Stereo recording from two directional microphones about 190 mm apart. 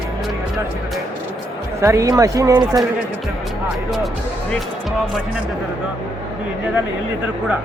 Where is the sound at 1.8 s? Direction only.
15° right (ahead or behind).